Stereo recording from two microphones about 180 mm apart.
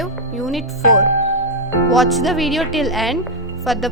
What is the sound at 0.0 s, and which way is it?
A child's voice, centre (ahead or behind).